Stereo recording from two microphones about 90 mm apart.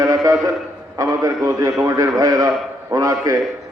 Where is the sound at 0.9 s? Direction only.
45° right (ahead or behind).